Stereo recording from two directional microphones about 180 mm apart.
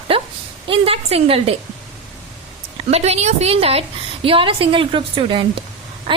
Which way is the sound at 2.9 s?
35° right (ahead or behind).